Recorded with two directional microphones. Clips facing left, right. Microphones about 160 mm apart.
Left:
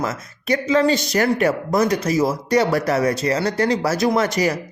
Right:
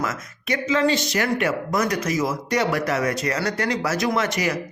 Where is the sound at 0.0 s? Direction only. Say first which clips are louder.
Left 3 dB; 30° left (ahead or behind).